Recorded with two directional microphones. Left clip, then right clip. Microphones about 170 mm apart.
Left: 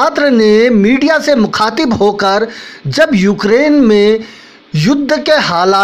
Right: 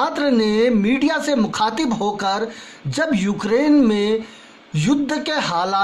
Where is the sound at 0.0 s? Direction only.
25° left (ahead or behind).